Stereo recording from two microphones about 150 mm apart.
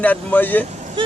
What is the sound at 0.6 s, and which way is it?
Vehicle, 50° right (ahead or behind).